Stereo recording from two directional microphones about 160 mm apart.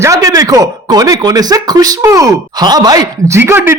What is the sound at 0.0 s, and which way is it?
Speech, 20° right (ahead or behind).